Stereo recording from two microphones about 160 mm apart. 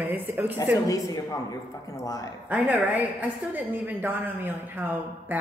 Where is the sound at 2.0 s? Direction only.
20° left (ahead or behind).